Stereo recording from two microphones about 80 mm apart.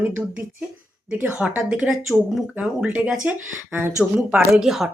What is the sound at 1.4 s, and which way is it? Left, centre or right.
Speech, centre.